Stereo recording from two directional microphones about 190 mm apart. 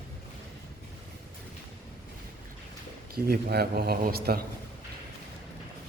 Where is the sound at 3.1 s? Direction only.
55° right (ahead or behind).